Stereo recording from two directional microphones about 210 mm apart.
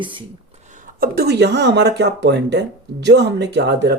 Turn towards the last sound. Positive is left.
turn(degrees=-50)  # may be behind; listen again after turning